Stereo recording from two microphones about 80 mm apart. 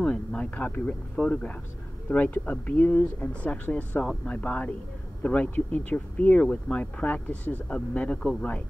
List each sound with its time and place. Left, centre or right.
0.0 s speech: centre